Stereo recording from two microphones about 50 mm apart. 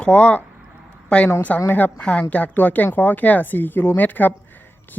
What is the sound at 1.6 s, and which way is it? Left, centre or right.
Speech, left.